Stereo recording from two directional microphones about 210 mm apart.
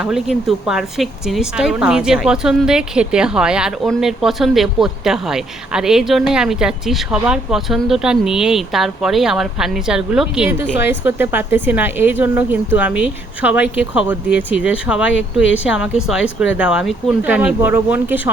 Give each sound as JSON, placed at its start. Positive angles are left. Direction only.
{"t": 0.0, "sound": "speech", "side_deg": 0}